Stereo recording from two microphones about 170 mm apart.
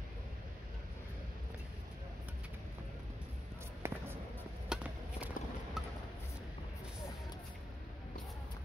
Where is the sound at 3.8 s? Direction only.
15° right (ahead or behind).